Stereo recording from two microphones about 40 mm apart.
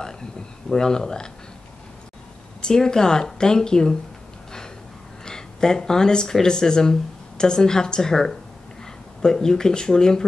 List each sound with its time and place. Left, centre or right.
0.7 s a woman's voice: centre
2.6 s a woman's voice: centre
5.2 s a woman's voice: centre